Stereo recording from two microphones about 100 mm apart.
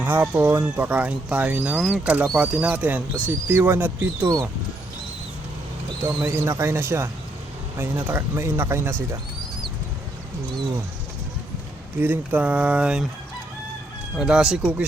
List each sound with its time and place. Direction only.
0.0 s speech: 20° right (ahead or behind)
1.8 s speech: 5° right (ahead or behind)
2.3 s speech: 15° right (ahead or behind)
6.2 s speech: 25° right (ahead or behind)
11.9 s speech: 20° right (ahead or behind)
14.2 s speech: 10° right (ahead or behind)